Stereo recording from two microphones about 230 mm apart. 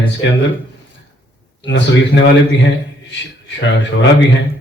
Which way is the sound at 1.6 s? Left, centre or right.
Left.